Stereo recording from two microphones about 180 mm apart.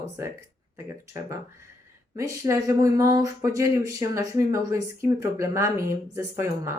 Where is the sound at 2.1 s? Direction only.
20° right (ahead or behind).